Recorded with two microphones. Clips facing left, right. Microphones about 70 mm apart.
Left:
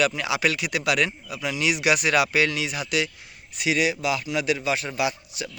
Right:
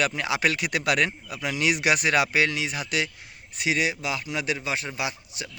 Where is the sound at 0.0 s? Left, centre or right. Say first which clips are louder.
Left 2 dB; right.